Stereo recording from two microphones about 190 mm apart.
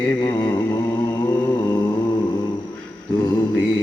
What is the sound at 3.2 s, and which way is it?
Mantra, 20° left (ahead or behind).